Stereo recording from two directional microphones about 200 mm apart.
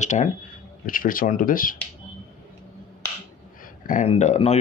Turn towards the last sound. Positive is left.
turn(degrees=35)  # may be behind; listen again after turning